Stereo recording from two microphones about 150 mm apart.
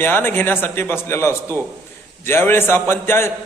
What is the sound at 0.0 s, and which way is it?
A man's voice, 15° left (ahead or behind).